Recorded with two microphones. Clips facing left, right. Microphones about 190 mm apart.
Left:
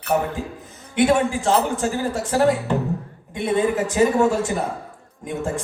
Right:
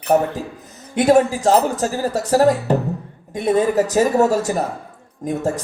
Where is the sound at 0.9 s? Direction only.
40° right (ahead or behind).